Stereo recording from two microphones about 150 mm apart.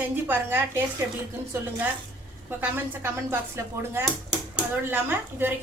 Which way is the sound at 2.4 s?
15° right (ahead or behind).